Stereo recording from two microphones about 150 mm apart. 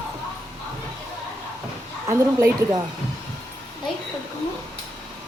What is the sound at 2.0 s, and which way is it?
Speech, 20° right (ahead or behind).